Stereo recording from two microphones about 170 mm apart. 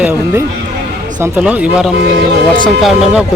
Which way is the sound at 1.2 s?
10° right (ahead or behind).